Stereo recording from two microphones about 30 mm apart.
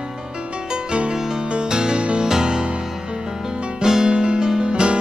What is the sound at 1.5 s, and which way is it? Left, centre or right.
Music, right.